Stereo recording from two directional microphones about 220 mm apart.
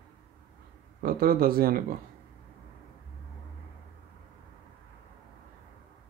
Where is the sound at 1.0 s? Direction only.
40° right (ahead or behind).